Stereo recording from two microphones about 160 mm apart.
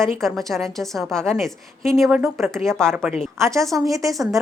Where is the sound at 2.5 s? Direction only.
5° left (ahead or behind).